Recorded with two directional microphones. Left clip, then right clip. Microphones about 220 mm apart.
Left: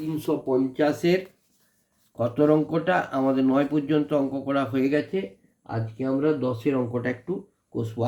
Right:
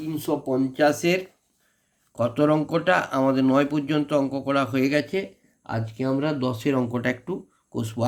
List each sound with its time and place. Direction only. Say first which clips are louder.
0.2 s speech: even; 15° right (ahead or behind)
5.6 s speech: right 2 dB; 40° right (ahead or behind)